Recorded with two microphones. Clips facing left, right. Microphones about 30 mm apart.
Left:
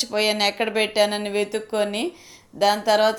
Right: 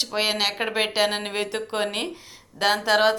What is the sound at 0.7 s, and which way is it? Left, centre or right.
Speech, right.